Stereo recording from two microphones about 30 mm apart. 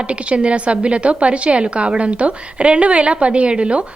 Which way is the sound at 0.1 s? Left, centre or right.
Right.